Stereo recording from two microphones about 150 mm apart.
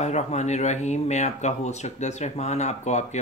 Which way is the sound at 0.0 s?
50° left (ahead or behind).